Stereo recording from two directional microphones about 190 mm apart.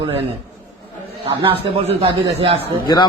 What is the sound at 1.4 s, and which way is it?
A man's voice, 30° right (ahead or behind).